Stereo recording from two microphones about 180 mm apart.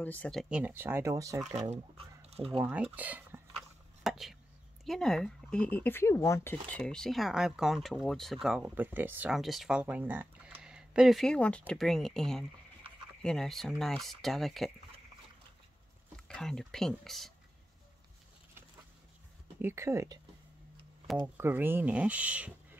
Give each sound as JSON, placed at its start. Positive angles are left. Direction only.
{"t": 0.0, "sound": "speech", "side_deg": 10}
{"t": 1.5, "sound": "speech", "side_deg": -40}
{"t": 2.6, "sound": "speech", "side_deg": -10}
{"t": 4.0, "sound": "a sound", "side_deg": 0}
{"t": 4.8, "sound": "speech", "side_deg": 5}
{"t": 16.3, "sound": "speech", "side_deg": 5}
{"t": 19.6, "sound": "speech", "side_deg": -15}
{"t": 21.4, "sound": "speech", "side_deg": -10}